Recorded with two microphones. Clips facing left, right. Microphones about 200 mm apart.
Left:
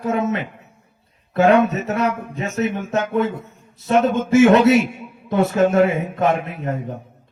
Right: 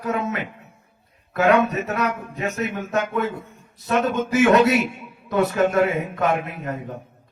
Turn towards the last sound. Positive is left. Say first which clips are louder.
# left 3 dB
turn(degrees=25)  # may be behind; listen again after turning